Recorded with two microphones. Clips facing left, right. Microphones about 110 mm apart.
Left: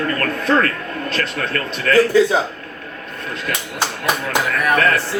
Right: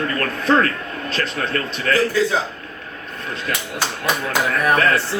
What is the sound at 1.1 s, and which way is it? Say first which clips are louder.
Speech: even; 35° right (ahead or behind).